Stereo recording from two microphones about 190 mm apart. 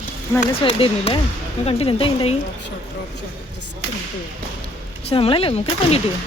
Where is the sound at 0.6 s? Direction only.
30° left (ahead or behind).